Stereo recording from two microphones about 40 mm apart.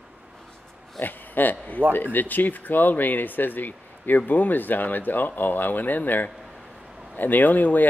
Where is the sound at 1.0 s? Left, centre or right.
Left.